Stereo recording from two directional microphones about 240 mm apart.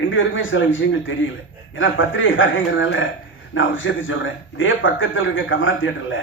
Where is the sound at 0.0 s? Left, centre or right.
Left.